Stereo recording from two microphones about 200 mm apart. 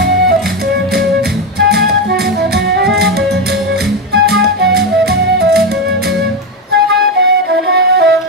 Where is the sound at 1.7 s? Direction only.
50° right (ahead or behind).